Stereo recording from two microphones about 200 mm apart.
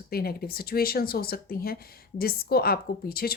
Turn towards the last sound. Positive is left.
turn(degrees=50)  # may be behind; listen again after turning